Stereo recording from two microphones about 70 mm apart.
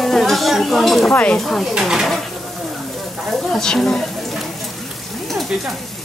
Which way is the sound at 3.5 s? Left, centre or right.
Centre.